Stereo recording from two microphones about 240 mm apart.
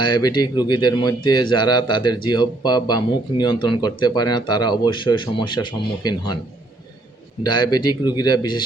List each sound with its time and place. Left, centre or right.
0.0 s a man's voice: centre
7.4 s a man's voice: centre